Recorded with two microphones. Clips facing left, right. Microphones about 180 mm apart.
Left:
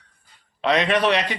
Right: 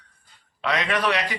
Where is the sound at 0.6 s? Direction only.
25° left (ahead or behind).